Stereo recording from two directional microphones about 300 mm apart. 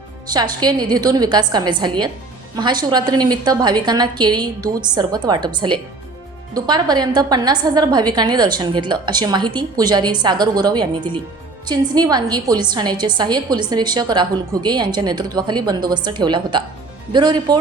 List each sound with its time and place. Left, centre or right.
0.6 s a woman's voice: centre